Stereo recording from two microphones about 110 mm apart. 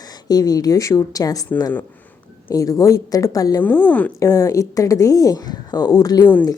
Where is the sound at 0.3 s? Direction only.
35° left (ahead or behind).